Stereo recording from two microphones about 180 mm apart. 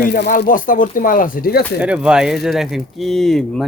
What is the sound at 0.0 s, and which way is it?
Speech, 70° left (ahead or behind).